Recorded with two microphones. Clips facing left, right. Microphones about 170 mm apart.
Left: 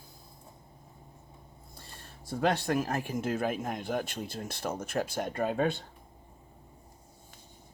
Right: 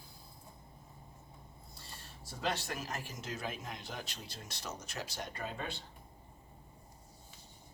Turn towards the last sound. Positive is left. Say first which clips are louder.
# left 13 dB
turn(degrees=55)  # may be behind; listen again after turning